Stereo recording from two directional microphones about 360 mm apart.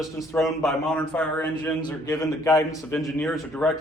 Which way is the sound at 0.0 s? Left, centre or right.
Centre.